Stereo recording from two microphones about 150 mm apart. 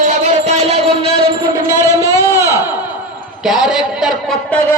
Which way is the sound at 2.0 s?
20° right (ahead or behind).